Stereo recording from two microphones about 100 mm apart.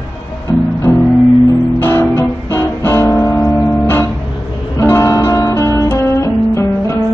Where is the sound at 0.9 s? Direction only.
30° left (ahead or behind).